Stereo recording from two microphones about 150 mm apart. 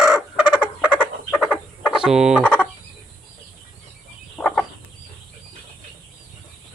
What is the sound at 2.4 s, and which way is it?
Fowl, 10° left (ahead or behind).